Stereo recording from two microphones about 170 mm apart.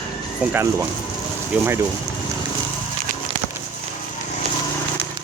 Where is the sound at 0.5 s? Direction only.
15° right (ahead or behind).